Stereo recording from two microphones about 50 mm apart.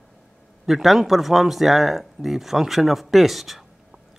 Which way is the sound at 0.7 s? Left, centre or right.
Centre.